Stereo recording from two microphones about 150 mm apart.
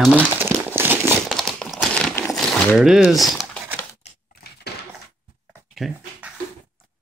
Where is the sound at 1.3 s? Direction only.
5° left (ahead or behind).